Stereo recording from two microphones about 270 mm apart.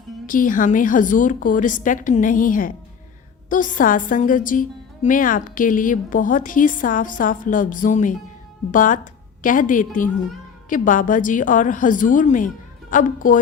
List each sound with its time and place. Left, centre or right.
0.3 s a woman's voice: left